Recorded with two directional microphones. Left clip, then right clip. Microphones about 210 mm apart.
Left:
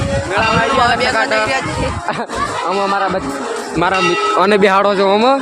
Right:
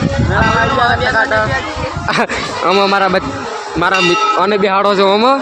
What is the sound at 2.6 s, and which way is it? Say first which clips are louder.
Speech: right 6 dB; 35° right (ahead or behind).